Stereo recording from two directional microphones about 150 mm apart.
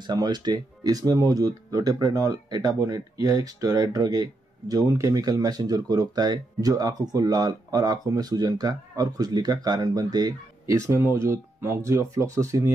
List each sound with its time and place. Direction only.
0.0 s speech: 30° right (ahead or behind)